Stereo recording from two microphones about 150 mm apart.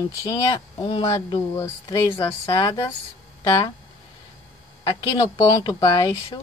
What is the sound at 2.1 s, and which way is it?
Speech, 35° left (ahead or behind).